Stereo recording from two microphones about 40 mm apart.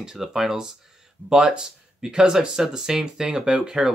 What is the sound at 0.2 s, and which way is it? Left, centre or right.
Speech, centre.